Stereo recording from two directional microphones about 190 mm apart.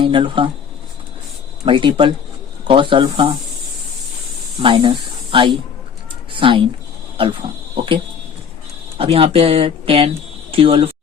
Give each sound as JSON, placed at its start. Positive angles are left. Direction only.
{"t": 0.0, "sound": "speech", "side_deg": -25}
{"t": 1.6, "sound": "speech", "side_deg": -25}
{"t": 4.6, "sound": "speech", "side_deg": -25}
{"t": 9.0, "sound": "speech", "side_deg": -30}